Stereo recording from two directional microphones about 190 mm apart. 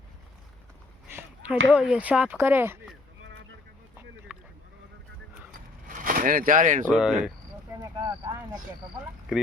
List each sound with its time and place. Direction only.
1.7 s speech: 5° right (ahead or behind)
4.3 s sheep: 10° right (ahead or behind)
5.9 s speech: 45° right (ahead or behind)
6.9 s speech: 5° right (ahead or behind)
7.8 s a sound: 20° right (ahead or behind)
9.3 s speech: 5° right (ahead or behind)